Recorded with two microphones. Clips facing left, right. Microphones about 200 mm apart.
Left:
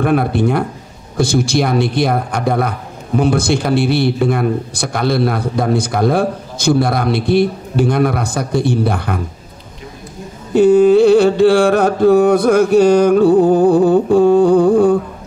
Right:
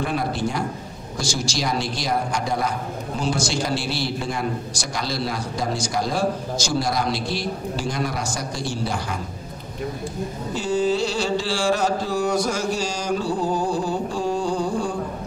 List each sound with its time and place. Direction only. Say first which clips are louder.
0.0 s a man's voice: left 10 dB; 60° left (ahead or behind)
10.5 s a man's voice: left 14 dB; 60° left (ahead or behind)